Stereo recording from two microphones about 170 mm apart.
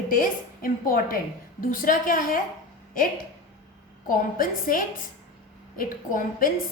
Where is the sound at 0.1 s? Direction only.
55° left (ahead or behind).